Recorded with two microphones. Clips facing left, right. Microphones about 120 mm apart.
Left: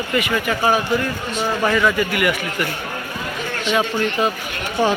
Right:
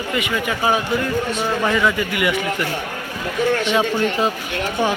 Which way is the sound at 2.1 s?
20° right (ahead or behind).